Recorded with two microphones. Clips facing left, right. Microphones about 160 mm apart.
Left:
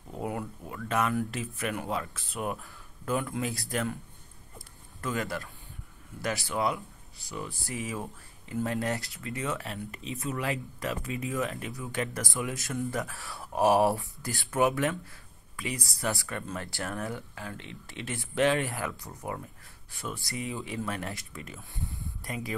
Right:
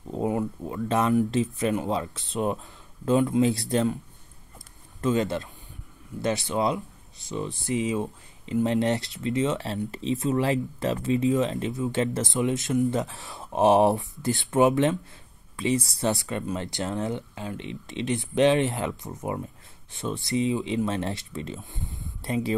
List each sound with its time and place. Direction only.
0.1 s speech: 25° right (ahead or behind)
5.0 s speech: 20° right (ahead or behind)